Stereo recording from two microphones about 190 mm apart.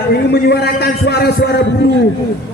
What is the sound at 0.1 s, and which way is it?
A man's voice, 60° left (ahead or behind).